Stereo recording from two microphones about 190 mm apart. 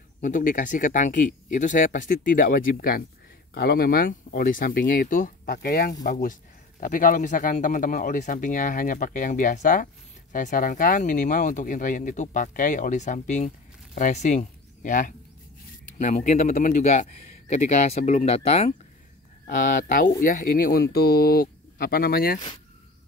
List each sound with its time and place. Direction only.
0.2 s speech: 45° left (ahead or behind)